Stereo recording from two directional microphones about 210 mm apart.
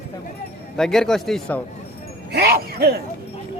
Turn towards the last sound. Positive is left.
turn(degrees=-45)  # may be behind; listen again after turning